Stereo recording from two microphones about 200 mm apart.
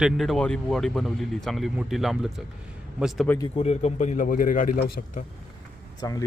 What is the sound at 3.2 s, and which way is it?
Speech, 10° left (ahead or behind).